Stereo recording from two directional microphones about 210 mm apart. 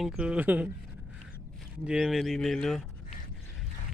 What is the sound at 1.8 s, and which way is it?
Speech, centre (ahead or behind).